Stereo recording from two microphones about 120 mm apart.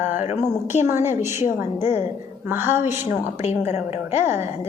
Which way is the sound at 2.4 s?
20° right (ahead or behind).